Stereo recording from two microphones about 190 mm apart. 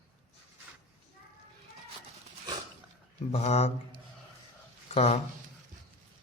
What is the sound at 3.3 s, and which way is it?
Speech, 35° left (ahead or behind).